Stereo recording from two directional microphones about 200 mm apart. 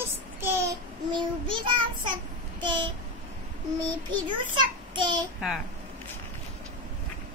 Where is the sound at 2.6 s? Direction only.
25° right (ahead or behind).